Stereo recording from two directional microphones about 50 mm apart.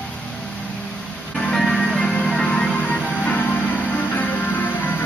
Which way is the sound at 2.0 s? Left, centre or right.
Centre.